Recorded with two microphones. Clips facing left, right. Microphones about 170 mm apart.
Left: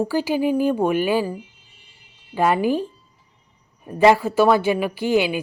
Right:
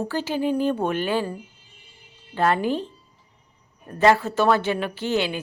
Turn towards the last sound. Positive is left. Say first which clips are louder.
# left 5 dB
turn(degrees=10)  # may be behind; listen again after turning